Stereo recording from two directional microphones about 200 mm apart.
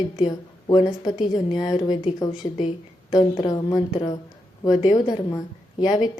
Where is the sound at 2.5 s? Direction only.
35° left (ahead or behind).